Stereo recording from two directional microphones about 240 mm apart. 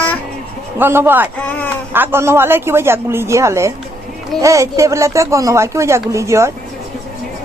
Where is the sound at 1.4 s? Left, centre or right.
Centre.